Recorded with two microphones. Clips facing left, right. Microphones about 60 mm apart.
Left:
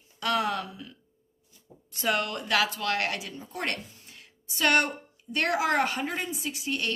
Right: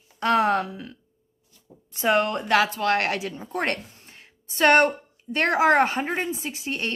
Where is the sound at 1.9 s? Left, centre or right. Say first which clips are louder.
Right 7 dB; right.